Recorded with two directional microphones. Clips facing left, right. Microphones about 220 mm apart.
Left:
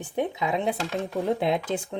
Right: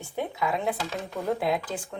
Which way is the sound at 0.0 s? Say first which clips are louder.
Left 3 dB; 20° left (ahead or behind).